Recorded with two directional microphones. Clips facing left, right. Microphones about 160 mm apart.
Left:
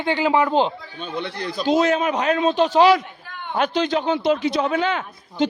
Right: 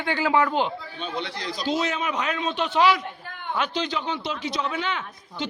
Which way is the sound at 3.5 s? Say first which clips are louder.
Left 7 dB; 50° left (ahead or behind).